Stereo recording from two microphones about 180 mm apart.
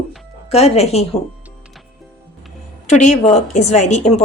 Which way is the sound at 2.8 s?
40° left (ahead or behind).